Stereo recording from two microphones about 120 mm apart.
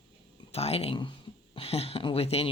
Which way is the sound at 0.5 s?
55° left (ahead or behind).